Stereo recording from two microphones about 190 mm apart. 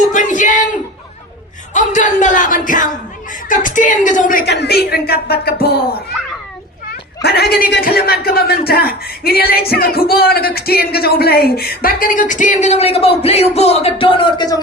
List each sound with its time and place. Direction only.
0.0 s a man's voice: 40° left (ahead or behind)
7.2 s a man's voice: 60° left (ahead or behind); by 14.6 s 20° left (ahead or behind)